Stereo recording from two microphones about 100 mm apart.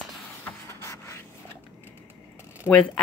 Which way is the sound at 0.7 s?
30° left (ahead or behind).